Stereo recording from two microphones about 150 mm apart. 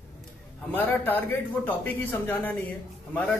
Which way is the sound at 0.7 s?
10° left (ahead or behind).